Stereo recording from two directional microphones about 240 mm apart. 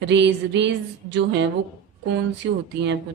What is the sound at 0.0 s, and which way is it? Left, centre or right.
Speech, right.